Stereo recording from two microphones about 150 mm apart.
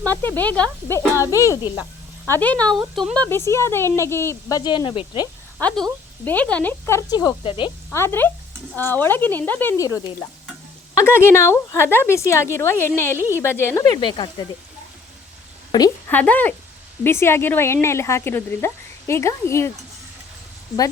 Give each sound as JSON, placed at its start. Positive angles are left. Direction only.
{"t": 0.0, "sound": "speech", "side_deg": 15}
{"t": 2.2, "sound": "speech", "side_deg": 10}
{"t": 3.2, "sound": "speech", "side_deg": 15}
{"t": 5.5, "sound": "speech", "side_deg": 5}
{"t": 7.4, "sound": "speech", "side_deg": 35}
{"t": 7.9, "sound": "speech", "side_deg": 15}
{"t": 15.7, "sound": "speech", "side_deg": 25}
{"t": 16.0, "sound": "speech", "side_deg": 10}